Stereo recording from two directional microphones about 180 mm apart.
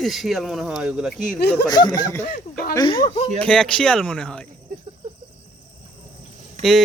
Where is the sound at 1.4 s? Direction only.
65° left (ahead or behind).